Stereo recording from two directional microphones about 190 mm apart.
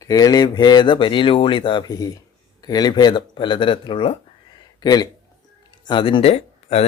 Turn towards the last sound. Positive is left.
turn(degrees=35)  # may be behind; listen again after turning